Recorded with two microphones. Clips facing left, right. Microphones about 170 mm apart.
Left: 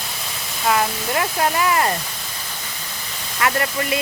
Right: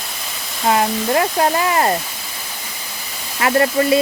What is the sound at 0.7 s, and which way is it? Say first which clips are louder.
Speech: right 4 dB; 30° right (ahead or behind).